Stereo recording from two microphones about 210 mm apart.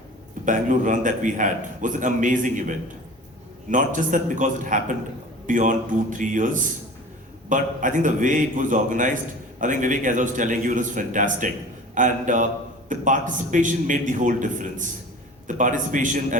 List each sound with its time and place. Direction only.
0.4 s a man's voice: 40° right (ahead or behind)